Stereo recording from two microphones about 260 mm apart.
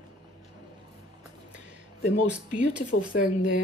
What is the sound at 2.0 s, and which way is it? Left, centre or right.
Speech, left.